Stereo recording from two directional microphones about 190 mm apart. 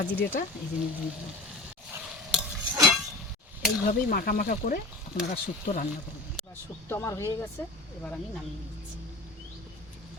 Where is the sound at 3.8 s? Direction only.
50° left (ahead or behind).